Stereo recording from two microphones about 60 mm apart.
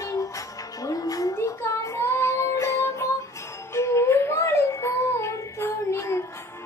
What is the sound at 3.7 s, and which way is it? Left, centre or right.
Music, left.